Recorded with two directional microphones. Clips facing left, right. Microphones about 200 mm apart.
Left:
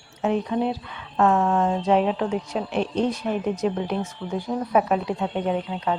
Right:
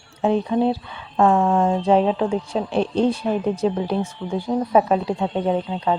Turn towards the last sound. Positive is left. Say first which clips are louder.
# right 3 dB
turn(degrees=-30)  # may be behind; listen again after turning